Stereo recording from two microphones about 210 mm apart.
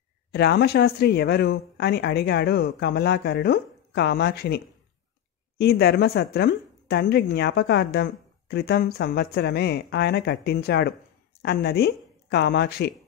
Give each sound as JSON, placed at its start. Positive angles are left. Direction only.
{"t": 0.3, "sound": "speech", "side_deg": 50}
{"t": 5.6, "sound": "speech", "side_deg": 50}